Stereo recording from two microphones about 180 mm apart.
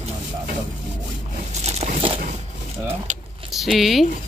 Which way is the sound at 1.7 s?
30° right (ahead or behind).